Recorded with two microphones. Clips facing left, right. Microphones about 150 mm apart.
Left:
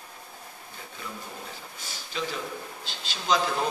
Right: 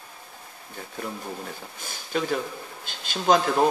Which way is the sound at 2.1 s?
50° right (ahead or behind).